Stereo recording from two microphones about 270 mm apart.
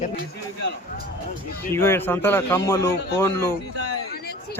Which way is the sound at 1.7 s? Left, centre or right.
Centre.